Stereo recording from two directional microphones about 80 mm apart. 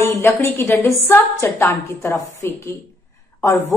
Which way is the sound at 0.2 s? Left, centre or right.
Left.